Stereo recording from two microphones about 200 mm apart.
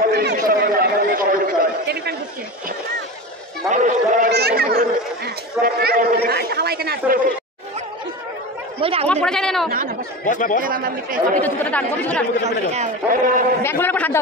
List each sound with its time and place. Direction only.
0.0 s chatter: 55° right (ahead or behind)
3.7 s a man's voice: 40° right (ahead or behind)
4.3 s speech: 55° right (ahead or behind)
9.0 s speech: 5° left (ahead or behind)
9.7 s speech: 45° right (ahead or behind)
10.2 s a man's voice: 40° left (ahead or behind)
10.6 s speech: 45° right (ahead or behind)
11.4 s speech: 10° left (ahead or behind)
12.4 s a man's voice: 35° right (ahead or behind)
13.6 s speech: 10° left (ahead or behind)